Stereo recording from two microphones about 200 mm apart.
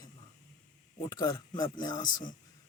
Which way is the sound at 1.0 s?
20° left (ahead or behind).